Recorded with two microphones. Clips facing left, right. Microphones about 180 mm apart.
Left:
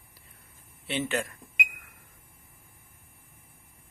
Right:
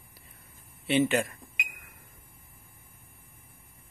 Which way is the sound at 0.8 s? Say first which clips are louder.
Right 6 dB; 15° right (ahead or behind).